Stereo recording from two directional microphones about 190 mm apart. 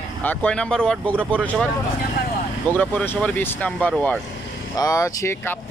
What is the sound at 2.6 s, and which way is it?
Speech, 10° left (ahead or behind).